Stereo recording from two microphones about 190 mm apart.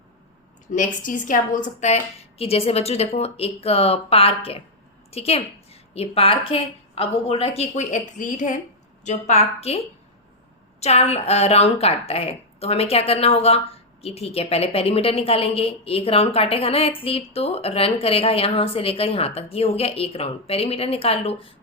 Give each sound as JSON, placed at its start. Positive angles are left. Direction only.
{"t": 0.7, "sound": "a woman's voice", "side_deg": 45}